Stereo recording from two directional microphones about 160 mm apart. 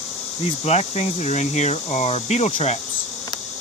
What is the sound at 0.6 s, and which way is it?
Speech, 45° left (ahead or behind).